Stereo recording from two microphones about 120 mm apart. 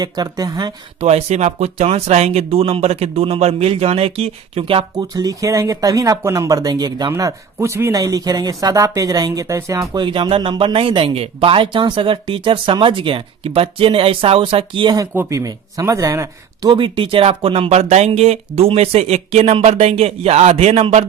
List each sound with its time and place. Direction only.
0.0 s speech: 35° right (ahead or behind)
1.0 s speech: 65° right (ahead or behind); by 4.9 s 50° right (ahead or behind)
4.9 s speech: 35° right (ahead or behind)
15.1 s speech: 25° right (ahead or behind)
16.7 s speech: 45° right (ahead or behind)
17.7 s speech: 65° right (ahead or behind)